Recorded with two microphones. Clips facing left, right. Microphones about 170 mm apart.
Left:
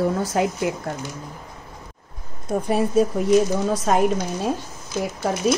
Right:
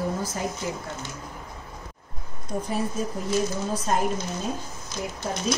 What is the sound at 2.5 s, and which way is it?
Speech, 70° left (ahead or behind).